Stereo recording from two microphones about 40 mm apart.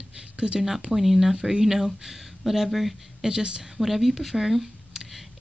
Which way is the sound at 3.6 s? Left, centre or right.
Centre.